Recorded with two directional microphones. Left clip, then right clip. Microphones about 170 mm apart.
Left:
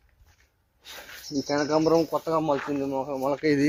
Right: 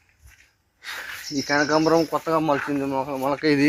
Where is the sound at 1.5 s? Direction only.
15° right (ahead or behind).